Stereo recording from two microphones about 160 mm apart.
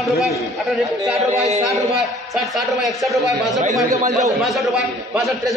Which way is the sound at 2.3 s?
Centre (ahead or behind).